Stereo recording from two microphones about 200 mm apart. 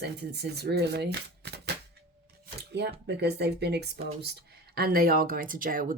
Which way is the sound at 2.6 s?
55° right (ahead or behind).